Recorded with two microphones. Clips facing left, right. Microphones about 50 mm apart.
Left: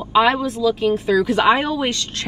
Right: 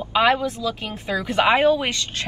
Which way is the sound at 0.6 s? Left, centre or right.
Right.